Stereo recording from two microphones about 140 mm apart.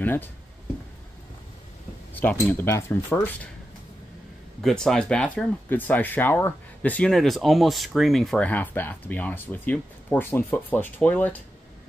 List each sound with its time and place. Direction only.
0.0 s speech: 15° left (ahead or behind)
2.1 s speech: 15° left (ahead or behind)
4.6 s speech: centre (ahead or behind)